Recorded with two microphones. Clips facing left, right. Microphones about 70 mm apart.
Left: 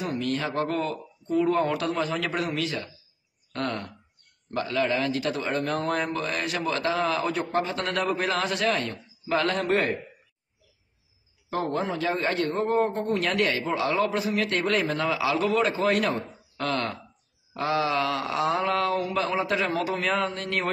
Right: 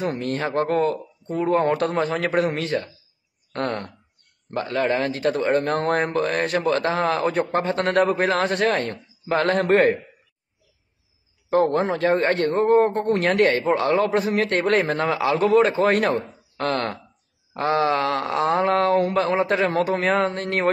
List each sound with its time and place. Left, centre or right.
0.0 s a man's voice: right
11.5 s a man's voice: right
18.9 s a man's voice: right